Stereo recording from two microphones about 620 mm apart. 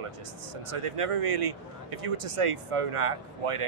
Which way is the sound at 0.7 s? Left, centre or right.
Right.